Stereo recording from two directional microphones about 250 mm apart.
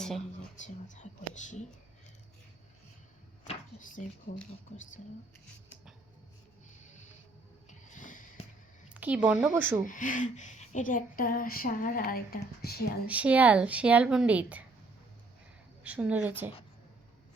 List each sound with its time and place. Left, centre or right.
0.5 s speech: left
3.4 s speech: left
7.7 s snort: left
8.9 s a woman's voice: centre
9.8 s speech: left
13.1 s speech: centre
15.8 s a woman's voice: centre